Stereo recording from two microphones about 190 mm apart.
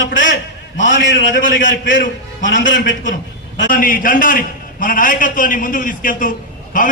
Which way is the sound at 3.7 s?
45° left (ahead or behind).